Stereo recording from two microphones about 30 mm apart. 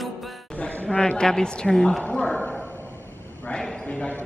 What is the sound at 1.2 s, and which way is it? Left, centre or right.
Speech, left.